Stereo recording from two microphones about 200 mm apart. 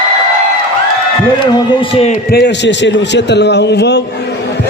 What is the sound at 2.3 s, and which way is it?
A man's voice, 55° left (ahead or behind).